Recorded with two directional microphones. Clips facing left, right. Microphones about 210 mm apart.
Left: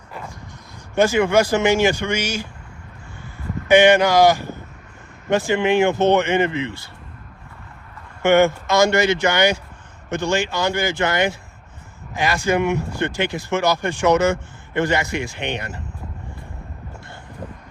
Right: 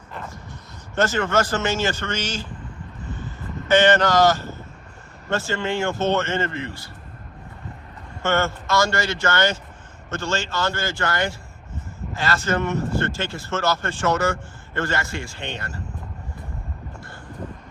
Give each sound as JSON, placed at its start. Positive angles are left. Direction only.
{"t": 0.9, "sound": "speech", "side_deg": 10}
{"t": 3.7, "sound": "speech", "side_deg": 10}
{"t": 8.2, "sound": "speech", "side_deg": 15}